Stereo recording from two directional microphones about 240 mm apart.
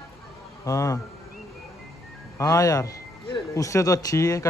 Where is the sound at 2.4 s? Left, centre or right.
Centre.